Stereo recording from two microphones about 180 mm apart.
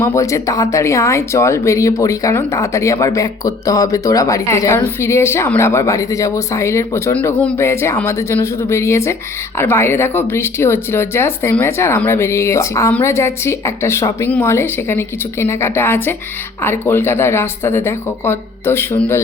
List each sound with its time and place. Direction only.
0.0 s speech: 15° left (ahead or behind)